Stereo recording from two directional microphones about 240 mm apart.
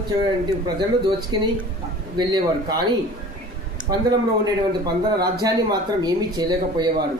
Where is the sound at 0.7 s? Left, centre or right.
Centre.